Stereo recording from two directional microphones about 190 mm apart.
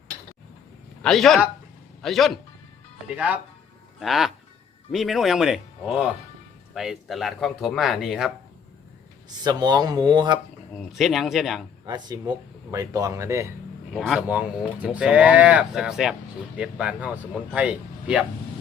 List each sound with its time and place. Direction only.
1.0 s a man's voice: centre (ahead or behind)
9.4 s speech: 20° right (ahead or behind)
10.8 s speech: centre (ahead or behind)
11.9 s speech: 20° right (ahead or behind)
13.9 s speech: centre (ahead or behind)